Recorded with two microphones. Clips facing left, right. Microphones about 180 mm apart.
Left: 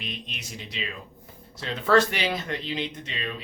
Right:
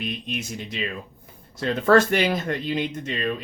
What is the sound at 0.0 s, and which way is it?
Speech, 50° right (ahead or behind).